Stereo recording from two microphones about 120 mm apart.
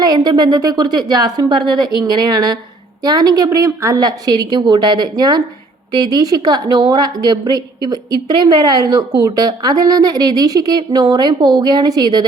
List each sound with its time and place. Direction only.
0.0 s speech: 30° right (ahead or behind)